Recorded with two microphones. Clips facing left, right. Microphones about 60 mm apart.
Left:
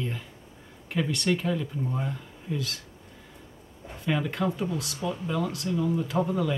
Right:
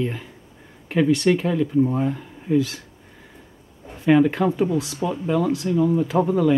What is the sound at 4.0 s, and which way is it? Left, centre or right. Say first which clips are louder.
Speech: right 11 dB; right.